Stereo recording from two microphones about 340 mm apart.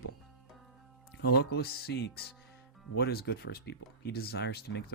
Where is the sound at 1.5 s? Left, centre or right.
Left.